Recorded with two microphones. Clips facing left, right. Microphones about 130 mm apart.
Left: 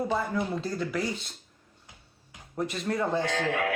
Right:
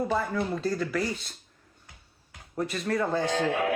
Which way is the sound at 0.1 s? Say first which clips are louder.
Right 1 dB; 20° left (ahead or behind).